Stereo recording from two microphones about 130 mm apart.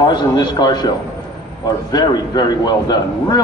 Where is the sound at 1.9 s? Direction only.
30° left (ahead or behind).